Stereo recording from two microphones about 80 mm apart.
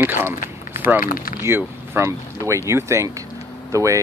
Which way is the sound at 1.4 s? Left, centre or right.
Right.